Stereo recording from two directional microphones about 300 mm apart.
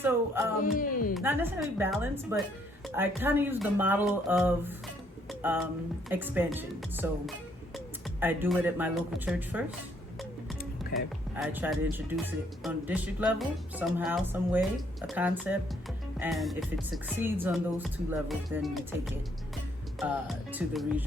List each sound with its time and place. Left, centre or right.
0.0 s speech: centre
0.6 s a man's voice: left
1.1 s speech: centre
8.2 s music: centre
10.9 s music: centre